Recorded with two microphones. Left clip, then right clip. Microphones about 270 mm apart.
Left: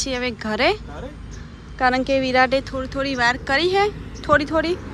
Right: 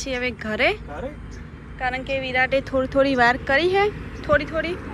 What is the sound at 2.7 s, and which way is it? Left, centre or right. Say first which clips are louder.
Speech: right 5 dB; centre.